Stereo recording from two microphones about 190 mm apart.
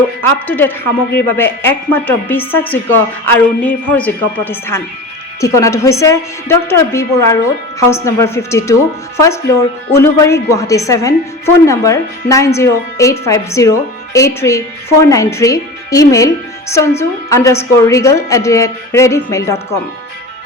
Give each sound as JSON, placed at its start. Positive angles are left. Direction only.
{"t": 0.2, "sound": "a woman's voice", "side_deg": 10}